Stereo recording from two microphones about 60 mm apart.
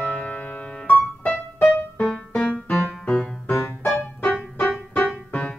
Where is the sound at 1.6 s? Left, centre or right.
Centre.